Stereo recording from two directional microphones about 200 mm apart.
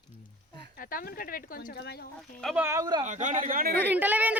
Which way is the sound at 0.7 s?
45° left (ahead or behind).